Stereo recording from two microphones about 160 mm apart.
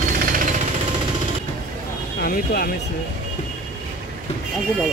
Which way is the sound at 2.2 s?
70° left (ahead or behind).